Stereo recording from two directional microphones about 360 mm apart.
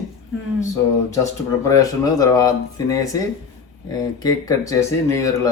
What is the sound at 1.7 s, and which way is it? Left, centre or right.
A woman's voice, centre.